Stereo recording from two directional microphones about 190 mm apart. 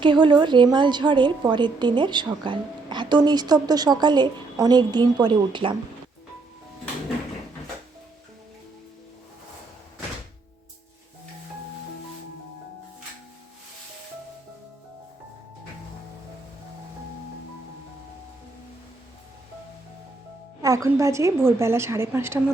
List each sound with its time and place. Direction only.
0.0 s a woman's voice: 25° right (ahead or behind)
20.6 s a woman's voice: 15° right (ahead or behind)